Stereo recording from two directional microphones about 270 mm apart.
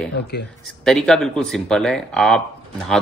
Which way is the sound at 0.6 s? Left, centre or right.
Centre.